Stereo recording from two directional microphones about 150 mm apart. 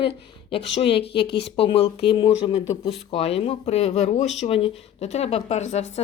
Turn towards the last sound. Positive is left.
turn(degrees=45)  # may be behind; listen again after turning